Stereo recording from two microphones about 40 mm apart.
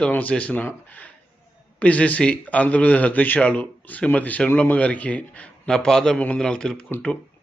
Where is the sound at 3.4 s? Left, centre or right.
Left.